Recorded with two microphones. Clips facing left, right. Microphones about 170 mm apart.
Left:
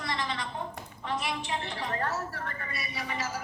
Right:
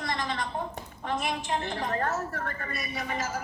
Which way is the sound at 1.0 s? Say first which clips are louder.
Right 2 dB; 50° right (ahead or behind).